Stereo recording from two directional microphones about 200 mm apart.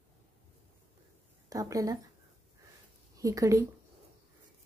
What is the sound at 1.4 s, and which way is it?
Speech, 15° right (ahead or behind).